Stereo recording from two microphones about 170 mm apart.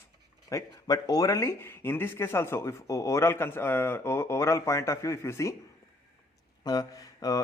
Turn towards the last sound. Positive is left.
turn(degrees=20)  # may be behind; listen again after turning